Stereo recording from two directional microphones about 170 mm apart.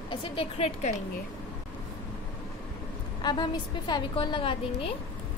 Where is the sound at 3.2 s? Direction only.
25° left (ahead or behind).